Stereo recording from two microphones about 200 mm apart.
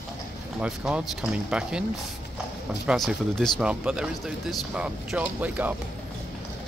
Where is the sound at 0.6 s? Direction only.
5° right (ahead or behind).